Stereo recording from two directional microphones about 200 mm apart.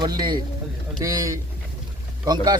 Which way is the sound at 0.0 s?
20° right (ahead or behind).